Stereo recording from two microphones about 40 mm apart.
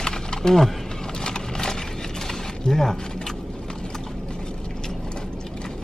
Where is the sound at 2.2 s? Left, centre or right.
Centre.